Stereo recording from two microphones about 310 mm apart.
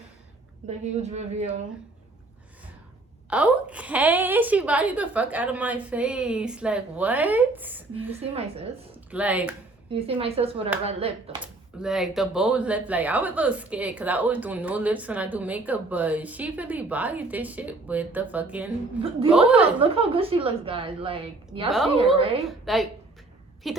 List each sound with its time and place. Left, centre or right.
0.7 s speech: right
3.2 s speech: centre
8.2 s speech: centre
9.0 s speech: centre
9.9 s a woman's voice: centre
11.8 s speech: centre
19.8 s a woman's voice: centre
22.4 s speech: centre